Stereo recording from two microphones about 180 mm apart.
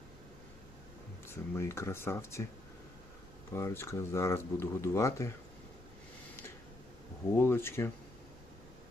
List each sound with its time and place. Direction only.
1.3 s speech: 15° left (ahead or behind)
3.5 s speech: 15° left (ahead or behind)
7.3 s speech: 15° left (ahead or behind)